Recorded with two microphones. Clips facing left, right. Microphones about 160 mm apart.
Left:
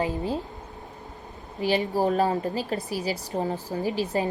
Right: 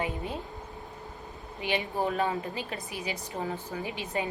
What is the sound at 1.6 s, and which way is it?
A woman's voice, 35° left (ahead or behind).